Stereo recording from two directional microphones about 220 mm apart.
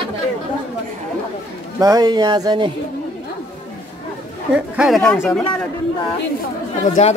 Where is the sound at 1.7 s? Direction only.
15° right (ahead or behind).